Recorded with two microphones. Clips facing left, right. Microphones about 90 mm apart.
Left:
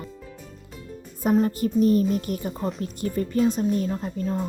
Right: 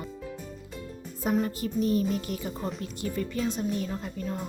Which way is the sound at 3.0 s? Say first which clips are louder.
Left 8 dB; 40° left (ahead or behind).